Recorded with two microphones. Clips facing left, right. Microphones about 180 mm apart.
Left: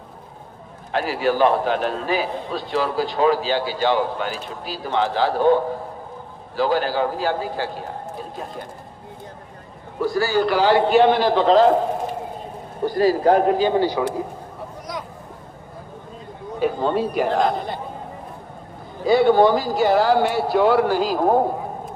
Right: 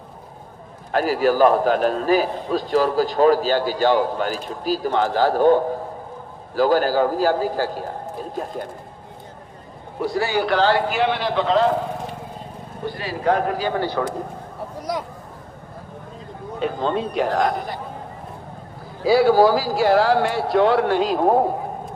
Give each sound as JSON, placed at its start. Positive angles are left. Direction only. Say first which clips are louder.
{"t": 0.9, "sound": "a man's voice", "louder": "right 3 dB", "side_deg": -40}
{"t": 10.2, "sound": "a man's voice", "louder": "left 2 dB", "side_deg": -20}
{"t": 10.4, "sound": "speech", "louder": "right 2 dB", "side_deg": 5}
{"t": 10.8, "sound": "a man's voice", "louder": "left 6 dB", "side_deg": 35}
{"t": 12.8, "sound": "a man's voice", "louder": "left 7 dB", "side_deg": 40}
{"t": 16.6, "sound": "a man's voice", "louder": "left 2 dB", "side_deg": 5}
{"t": 19.0, "sound": "speech", "louder": "even", "side_deg": -5}